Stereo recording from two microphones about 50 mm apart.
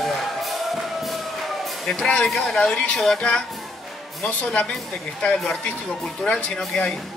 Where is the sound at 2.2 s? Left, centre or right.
Centre.